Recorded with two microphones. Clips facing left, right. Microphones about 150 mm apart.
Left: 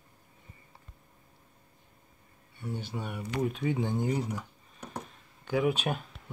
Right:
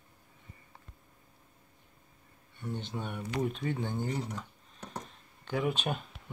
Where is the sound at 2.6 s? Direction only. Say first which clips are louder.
Left 1 dB; 5° left (ahead or behind).